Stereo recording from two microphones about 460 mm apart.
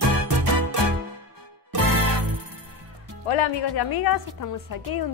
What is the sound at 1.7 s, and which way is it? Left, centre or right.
Music, right.